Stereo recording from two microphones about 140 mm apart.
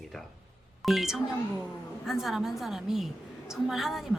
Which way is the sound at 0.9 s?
Centre (ahead or behind).